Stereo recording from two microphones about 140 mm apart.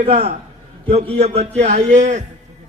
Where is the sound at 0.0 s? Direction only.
45° right (ahead or behind).